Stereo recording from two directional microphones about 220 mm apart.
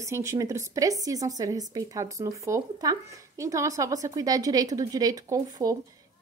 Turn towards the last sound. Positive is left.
turn(degrees=-15)  # may be behind; listen again after turning